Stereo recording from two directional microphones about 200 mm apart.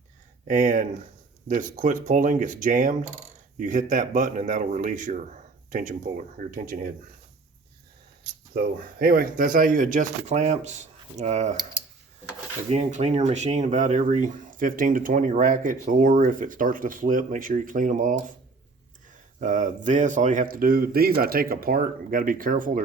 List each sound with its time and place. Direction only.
0.4 s speech: 40° right (ahead or behind)
8.2 s speech: 50° right (ahead or behind)
12.7 s speech: 35° right (ahead or behind)
19.4 s speech: 40° right (ahead or behind)